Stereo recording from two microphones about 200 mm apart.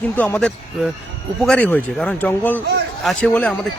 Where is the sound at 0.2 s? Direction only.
5° left (ahead or behind).